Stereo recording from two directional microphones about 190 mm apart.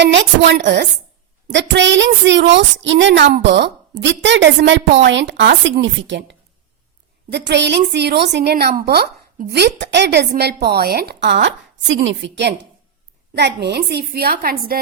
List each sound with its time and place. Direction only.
0.0 s a woman's voice: 70° right (ahead or behind); by 14.8 s 50° right (ahead or behind)